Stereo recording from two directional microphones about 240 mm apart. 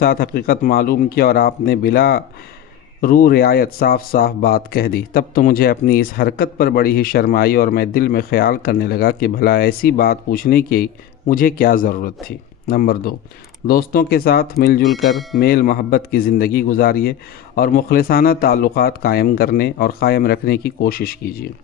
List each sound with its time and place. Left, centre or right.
0.0 s a man's voice: left
14.8 s a sound: centre
15.4 s a man's voice: left